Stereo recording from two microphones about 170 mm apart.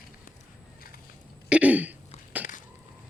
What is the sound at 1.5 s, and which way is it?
Throat clearing, 10° right (ahead or behind).